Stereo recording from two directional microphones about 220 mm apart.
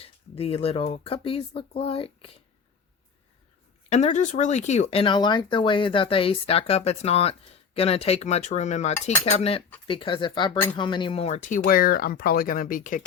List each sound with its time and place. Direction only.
0.0 s speech: 25° left (ahead or behind)
3.8 s speech: 30° left (ahead or behind)